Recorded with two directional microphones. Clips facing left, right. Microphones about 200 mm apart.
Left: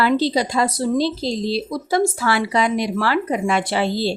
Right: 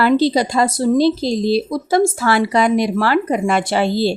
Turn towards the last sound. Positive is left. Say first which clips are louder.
# right 3 dB
turn(degrees=-45)  # may be behind; listen again after turning